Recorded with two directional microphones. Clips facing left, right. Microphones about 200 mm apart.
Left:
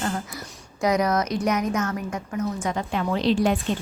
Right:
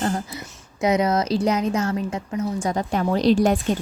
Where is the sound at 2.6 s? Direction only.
40° right (ahead or behind).